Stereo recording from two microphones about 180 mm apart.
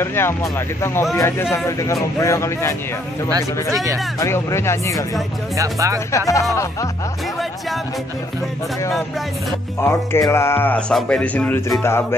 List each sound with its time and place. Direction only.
0.0 s speech: 15° left (ahead or behind)
3.3 s speech: 20° right (ahead or behind)
4.2 s speech: 15° left (ahead or behind)
5.6 s speech: 15° right (ahead or behind)
6.1 s speech: 15° left (ahead or behind)
9.8 s speech: 15° left (ahead or behind)